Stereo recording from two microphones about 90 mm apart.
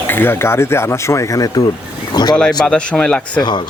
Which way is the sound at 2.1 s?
50° left (ahead or behind).